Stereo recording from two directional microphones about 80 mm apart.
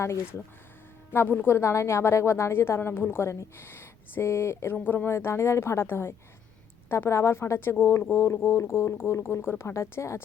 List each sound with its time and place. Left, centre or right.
0.0 s a woman's voice: left